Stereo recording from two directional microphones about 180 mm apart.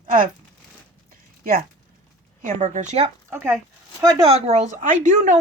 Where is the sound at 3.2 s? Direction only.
15° right (ahead or behind).